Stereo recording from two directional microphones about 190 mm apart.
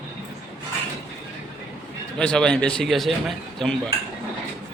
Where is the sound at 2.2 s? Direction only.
5° left (ahead or behind).